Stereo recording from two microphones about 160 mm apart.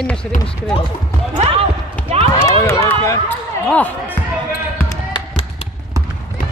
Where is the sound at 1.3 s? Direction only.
45° right (ahead or behind).